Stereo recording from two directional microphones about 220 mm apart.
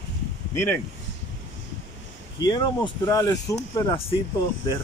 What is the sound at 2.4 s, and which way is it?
Speech, 20° left (ahead or behind).